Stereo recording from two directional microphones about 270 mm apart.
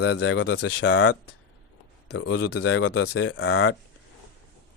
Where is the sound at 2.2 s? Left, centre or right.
Left.